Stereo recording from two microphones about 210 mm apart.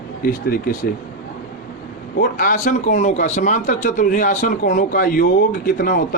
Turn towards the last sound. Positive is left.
turn(degrees=45)  # may be behind; listen again after turning